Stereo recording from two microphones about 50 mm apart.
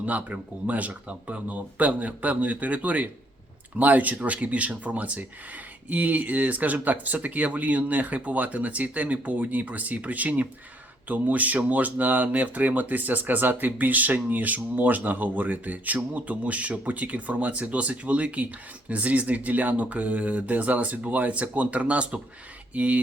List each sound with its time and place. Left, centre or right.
0.0 s speech: right